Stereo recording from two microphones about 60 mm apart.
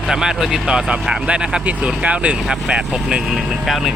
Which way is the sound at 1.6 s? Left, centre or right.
Right.